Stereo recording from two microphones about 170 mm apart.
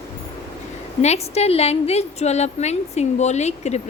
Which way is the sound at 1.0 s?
40° left (ahead or behind).